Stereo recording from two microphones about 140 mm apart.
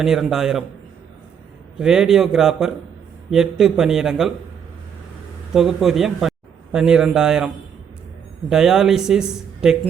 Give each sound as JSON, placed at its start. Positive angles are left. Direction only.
{"t": 0.0, "sound": "speech", "side_deg": -5}
{"t": 1.8, "sound": "speech", "side_deg": -5}
{"t": 5.5, "sound": "a man's voice", "side_deg": 0}